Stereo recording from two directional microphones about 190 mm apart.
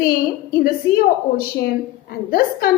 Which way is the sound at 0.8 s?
15° left (ahead or behind).